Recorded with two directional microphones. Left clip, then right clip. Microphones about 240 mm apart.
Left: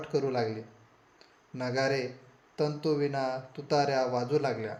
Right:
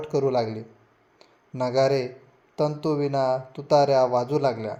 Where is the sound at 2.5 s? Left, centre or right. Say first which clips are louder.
Right 5 dB; right.